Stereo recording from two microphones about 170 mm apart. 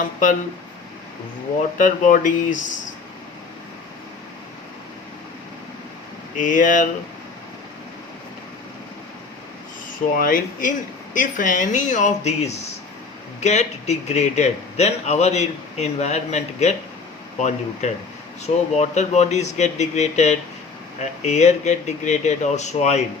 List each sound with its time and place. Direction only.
1.8 s speech: 50° left (ahead or behind)
6.3 s speech: 50° left (ahead or behind)
10.2 s a man's voice: 55° left (ahead or behind)